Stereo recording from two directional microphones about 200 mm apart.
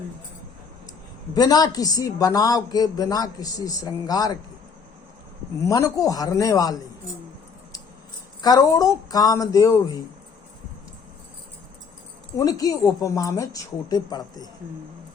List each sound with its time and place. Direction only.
1.4 s speech: 20° left (ahead or behind)
5.6 s a woman's voice: 15° left (ahead or behind)
8.4 s a woman's voice: 20° left (ahead or behind)
12.4 s a woman's voice: 20° left (ahead or behind)